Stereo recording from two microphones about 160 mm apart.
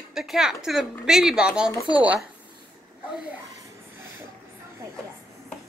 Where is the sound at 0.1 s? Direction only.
Centre (ahead or behind).